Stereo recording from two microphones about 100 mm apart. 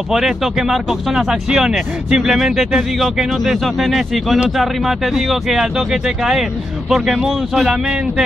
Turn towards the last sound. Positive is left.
turn(degrees=-5)  # may be behind; listen again after turning